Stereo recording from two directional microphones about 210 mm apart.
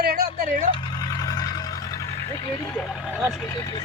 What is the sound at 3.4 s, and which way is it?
Speech, 15° left (ahead or behind).